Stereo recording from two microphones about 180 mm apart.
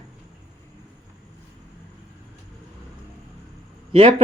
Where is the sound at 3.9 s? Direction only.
35° right (ahead or behind).